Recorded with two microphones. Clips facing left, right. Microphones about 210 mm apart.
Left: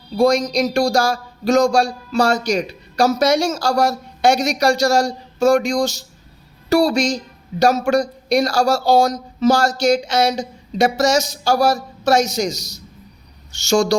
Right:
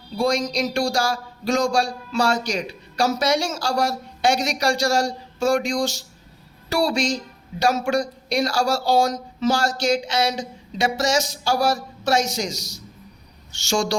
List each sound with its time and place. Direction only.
0.2 s a man's voice: 40° left (ahead or behind)